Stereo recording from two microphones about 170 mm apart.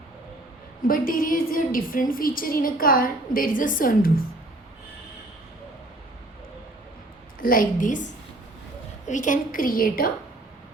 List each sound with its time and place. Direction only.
0.8 s a woman's voice: 55° left (ahead or behind)
7.3 s a woman's voice: 55° left (ahead or behind)